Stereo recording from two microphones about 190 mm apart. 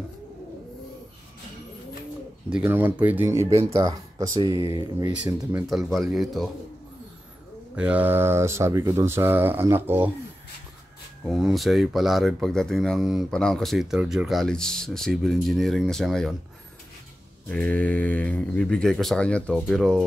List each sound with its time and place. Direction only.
2.5 s speech: 10° right (ahead or behind)
5.7 s speech: centre (ahead or behind)
7.7 s speech: 5° right (ahead or behind)
11.2 s speech: centre (ahead or behind)
17.5 s speech: 5° left (ahead or behind)